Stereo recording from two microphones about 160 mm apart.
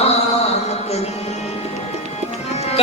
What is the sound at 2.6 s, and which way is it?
Music, 40° left (ahead or behind).